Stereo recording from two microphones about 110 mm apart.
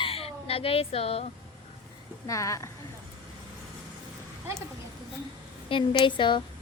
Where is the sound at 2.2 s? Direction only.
30° left (ahead or behind).